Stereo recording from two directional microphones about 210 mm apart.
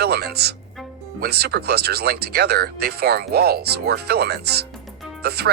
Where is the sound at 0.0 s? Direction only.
50° right (ahead or behind).